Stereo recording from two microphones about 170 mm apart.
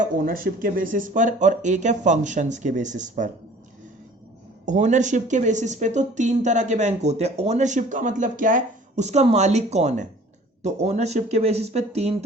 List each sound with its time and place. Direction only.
0.0 s speech: 55° right (ahead or behind)
4.6 s speech: 45° right (ahead or behind)